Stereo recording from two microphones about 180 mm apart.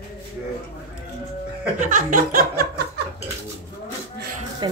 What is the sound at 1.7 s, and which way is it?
Speech, 45° right (ahead or behind).